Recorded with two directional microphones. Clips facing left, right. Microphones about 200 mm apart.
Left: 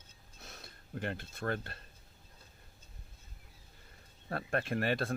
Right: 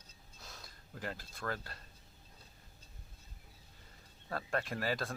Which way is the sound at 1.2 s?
25° left (ahead or behind).